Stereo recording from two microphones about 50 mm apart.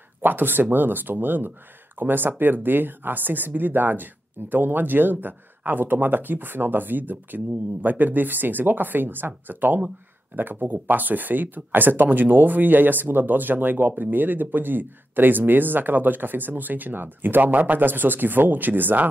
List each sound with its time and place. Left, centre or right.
0.2 s speech: right